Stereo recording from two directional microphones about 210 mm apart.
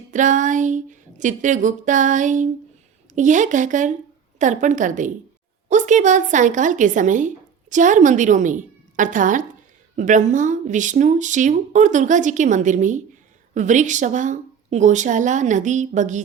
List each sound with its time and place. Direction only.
0.1 s speech: 35° right (ahead or behind)